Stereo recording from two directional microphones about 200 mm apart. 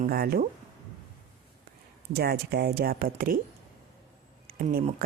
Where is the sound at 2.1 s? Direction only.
50° right (ahead or behind).